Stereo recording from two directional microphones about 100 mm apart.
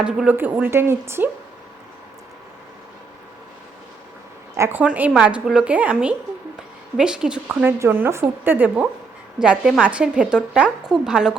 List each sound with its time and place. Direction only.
0.0 s a woman's voice: 10° right (ahead or behind)
0.3 s speech: 20° right (ahead or behind)
4.5 s a woman's voice: 30° right (ahead or behind)
4.8 s a woman's voice: 15° right (ahead or behind)
7.8 s a woman's voice: 20° right (ahead or behind)